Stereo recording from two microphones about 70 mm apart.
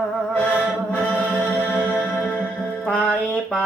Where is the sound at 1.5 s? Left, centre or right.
Left.